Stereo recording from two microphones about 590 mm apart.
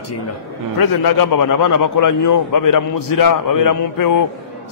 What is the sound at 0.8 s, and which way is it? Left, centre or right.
A man's voice, left.